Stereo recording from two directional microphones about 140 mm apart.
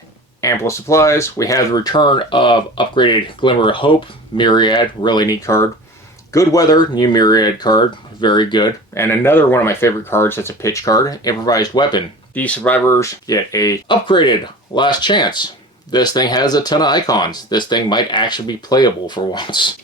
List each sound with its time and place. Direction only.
0.4 s speech: 20° left (ahead or behind)
9.0 s speech: 15° left (ahead or behind)
12.3 s speech: 10° left (ahead or behind); by 19.7 s 35° left (ahead or behind)